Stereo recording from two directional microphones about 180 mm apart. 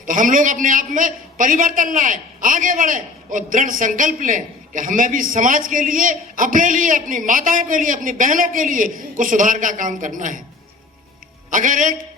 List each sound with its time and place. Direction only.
0.0 s a man's voice: 50° right (ahead or behind)
11.5 s a man's voice: 45° right (ahead or behind)